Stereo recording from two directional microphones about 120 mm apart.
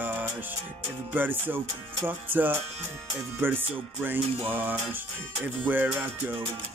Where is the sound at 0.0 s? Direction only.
15° right (ahead or behind).